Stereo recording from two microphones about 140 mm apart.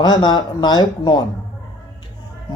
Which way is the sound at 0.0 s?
30° left (ahead or behind).